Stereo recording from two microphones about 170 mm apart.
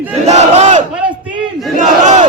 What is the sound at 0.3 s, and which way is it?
Battle cry, 45° right (ahead or behind).